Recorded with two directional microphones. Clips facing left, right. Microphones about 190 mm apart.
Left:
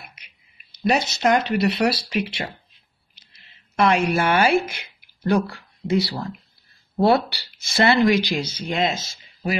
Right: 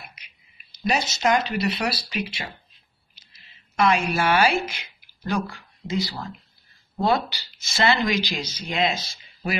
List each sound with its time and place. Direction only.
0.8 s speech: 60° left (ahead or behind)
3.7 s speech: 60° left (ahead or behind); by 9.6 s 40° left (ahead or behind)